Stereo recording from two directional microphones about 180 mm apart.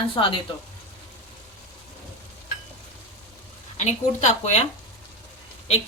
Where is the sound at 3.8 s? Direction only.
40° left (ahead or behind).